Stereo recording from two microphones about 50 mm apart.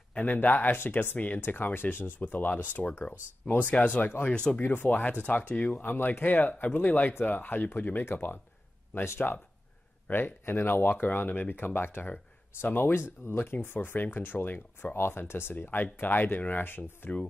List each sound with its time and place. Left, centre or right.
0.2 s speech: left
4.3 s speech: centre
4.6 s speech: left
8.9 s speech: left
10.1 s speech: left
15.0 s speech: left
15.6 s speech: left